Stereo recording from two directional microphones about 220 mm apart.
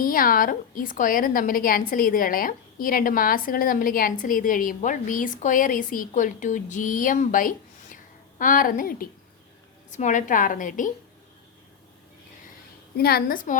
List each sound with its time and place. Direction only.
0.0 s a woman's voice: 40° left (ahead or behind)
13.0 s a woman's voice: 45° left (ahead or behind)